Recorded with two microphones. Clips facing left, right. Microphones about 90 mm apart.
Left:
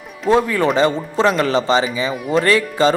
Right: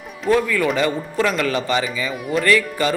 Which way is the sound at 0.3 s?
30° left (ahead or behind).